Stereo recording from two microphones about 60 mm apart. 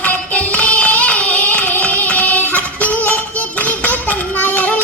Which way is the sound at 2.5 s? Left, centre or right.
Left.